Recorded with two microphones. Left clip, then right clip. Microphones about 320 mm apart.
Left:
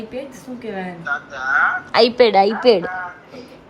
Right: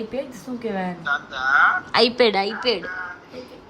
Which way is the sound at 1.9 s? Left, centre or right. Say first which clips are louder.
Left 5 dB; centre.